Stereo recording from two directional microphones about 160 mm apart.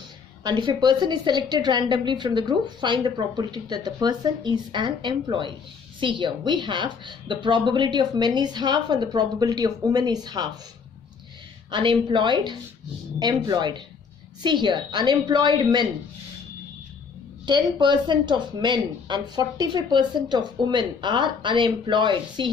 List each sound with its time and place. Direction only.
0.4 s a woman's voice: 25° right (ahead or behind)
11.7 s a woman's voice: 30° right (ahead or behind)
17.5 s a woman's voice: 30° right (ahead or behind)